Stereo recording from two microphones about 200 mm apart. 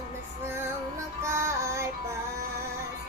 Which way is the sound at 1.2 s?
15° right (ahead or behind).